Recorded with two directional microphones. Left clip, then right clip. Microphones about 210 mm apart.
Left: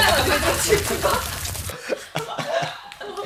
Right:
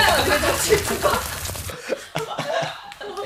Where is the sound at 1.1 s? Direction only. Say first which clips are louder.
Even; centre (ahead or behind).